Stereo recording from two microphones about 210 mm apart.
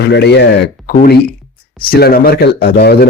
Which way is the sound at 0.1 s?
50° left (ahead or behind).